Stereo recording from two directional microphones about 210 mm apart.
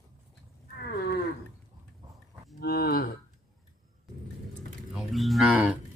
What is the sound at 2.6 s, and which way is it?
Cattle, 45° left (ahead or behind).